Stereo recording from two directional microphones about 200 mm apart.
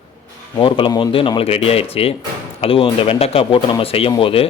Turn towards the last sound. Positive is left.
turn(degrees=25)  # may be behind; listen again after turning